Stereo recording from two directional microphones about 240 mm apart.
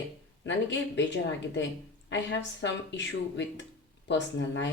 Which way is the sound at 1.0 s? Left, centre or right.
Left.